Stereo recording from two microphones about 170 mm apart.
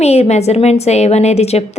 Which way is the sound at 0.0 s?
40° left (ahead or behind).